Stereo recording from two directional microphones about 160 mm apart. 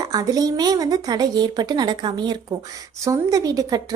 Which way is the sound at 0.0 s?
20° right (ahead or behind).